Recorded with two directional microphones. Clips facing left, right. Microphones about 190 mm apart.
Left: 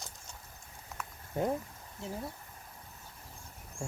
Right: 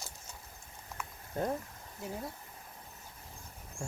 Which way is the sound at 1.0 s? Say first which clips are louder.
Even; centre (ahead or behind).